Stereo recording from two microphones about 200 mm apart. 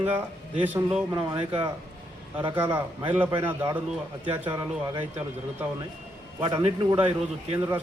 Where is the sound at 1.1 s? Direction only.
25° right (ahead or behind).